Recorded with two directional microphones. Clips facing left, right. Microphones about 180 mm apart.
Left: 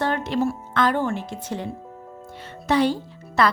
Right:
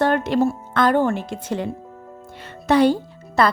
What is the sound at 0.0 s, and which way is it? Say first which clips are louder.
Music: right 5 dB; 55° right (ahead or behind).